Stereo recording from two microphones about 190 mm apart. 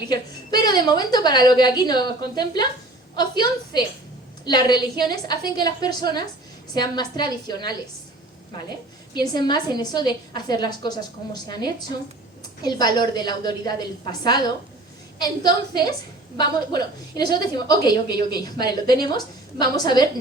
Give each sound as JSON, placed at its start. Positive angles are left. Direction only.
{"t": 0.1, "sound": "a woman's voice", "side_deg": 20}
{"t": 9.2, "sound": "a woman's voice", "side_deg": 20}